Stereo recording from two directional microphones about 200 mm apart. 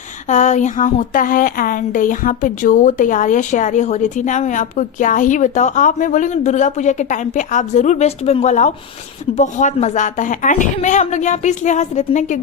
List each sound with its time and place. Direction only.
0.3 s a woman's voice: 35° left (ahead or behind)